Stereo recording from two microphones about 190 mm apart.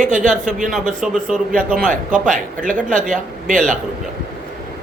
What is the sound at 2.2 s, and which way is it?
Speech, 45° right (ahead or behind).